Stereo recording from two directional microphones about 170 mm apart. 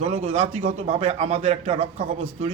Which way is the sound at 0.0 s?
35° right (ahead or behind).